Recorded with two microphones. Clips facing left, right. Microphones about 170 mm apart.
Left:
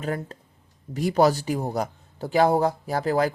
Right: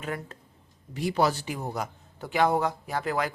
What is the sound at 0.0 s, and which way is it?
A man's voice, 35° left (ahead or behind).